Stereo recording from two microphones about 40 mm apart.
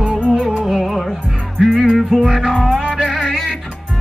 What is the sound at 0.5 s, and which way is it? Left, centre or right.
Music, centre.